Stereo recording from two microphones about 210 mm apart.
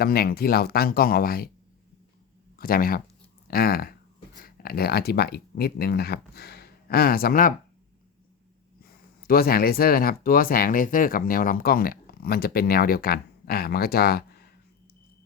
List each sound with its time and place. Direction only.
0.0 s speech: 45° left (ahead or behind)
2.6 s speech: 45° left (ahead or behind)
8.8 s speech: 45° left (ahead or behind)